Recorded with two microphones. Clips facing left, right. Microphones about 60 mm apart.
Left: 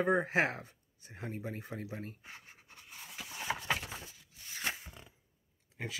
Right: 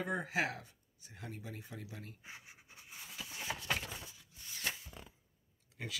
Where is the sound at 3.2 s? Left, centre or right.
Left.